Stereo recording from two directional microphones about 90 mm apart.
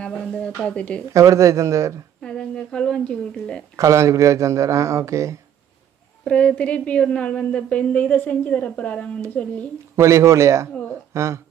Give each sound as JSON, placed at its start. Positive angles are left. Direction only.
{"t": 0.6, "sound": "a woman's voice", "side_deg": 10}
{"t": 1.1, "sound": "speech", "side_deg": -35}
{"t": 2.2, "sound": "a woman's voice", "side_deg": 10}
{"t": 3.7, "sound": "speech", "side_deg": -35}
{"t": 6.2, "sound": "a woman's voice", "side_deg": 10}
{"t": 9.9, "sound": "speech", "side_deg": -35}